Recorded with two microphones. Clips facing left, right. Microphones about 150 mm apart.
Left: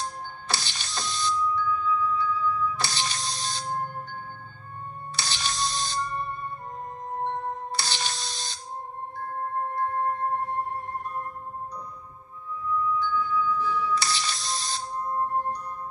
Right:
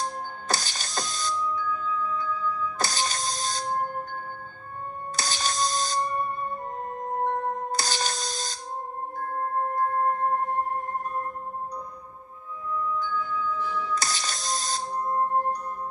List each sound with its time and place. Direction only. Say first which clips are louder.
0.0 s music: right 3 dB; 45° right (ahead or behind)
5.1 s music: right 3 dB; 45° right (ahead or behind)
9.8 s music: right 2 dB; 45° right (ahead or behind)
13.0 s music: left 3 dB; 45° right (ahead or behind)